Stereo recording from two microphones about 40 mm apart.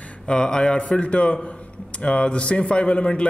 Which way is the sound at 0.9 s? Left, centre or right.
Left.